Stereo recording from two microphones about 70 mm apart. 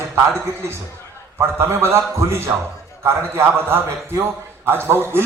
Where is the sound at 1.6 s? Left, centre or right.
Right.